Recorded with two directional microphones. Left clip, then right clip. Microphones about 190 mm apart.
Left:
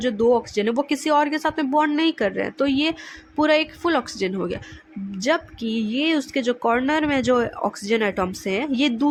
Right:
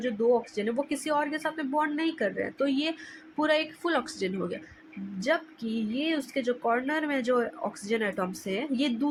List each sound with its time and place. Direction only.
0.0 s speech: 35° left (ahead or behind)